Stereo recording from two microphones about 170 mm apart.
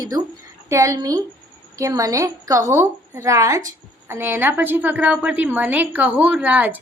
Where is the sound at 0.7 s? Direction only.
20° right (ahead or behind).